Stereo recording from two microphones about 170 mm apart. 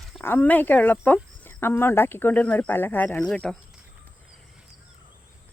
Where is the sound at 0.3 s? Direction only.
10° left (ahead or behind).